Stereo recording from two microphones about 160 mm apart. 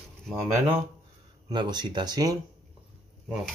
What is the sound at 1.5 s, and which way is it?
Speech, 25° right (ahead or behind).